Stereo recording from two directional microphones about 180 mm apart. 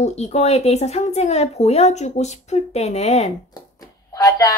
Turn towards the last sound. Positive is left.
turn(degrees=20)  # may be behind; listen again after turning